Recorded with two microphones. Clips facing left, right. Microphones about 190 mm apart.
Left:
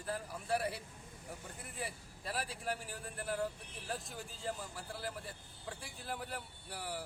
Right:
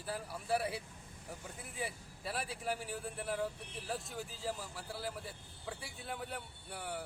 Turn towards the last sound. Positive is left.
turn(degrees=0)  # may be behind; listen again after turning